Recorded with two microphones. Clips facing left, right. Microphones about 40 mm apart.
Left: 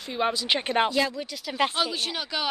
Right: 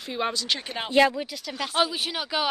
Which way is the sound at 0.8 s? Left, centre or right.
Right.